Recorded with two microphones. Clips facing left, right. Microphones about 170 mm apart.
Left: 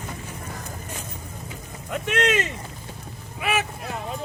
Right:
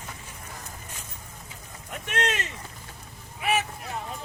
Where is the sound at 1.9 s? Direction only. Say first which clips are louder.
Left 6 dB; 90° left.